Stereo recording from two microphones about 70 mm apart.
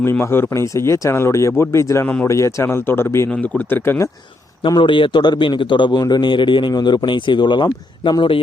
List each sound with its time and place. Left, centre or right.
0.0 s speech: left
0.6 s speech: left
2.6 s speech: left
3.2 s speech: centre
3.7 s speech: left
4.7 s a man's voice: left